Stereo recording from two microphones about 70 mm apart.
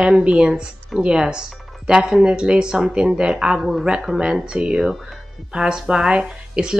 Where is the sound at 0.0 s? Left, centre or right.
Centre.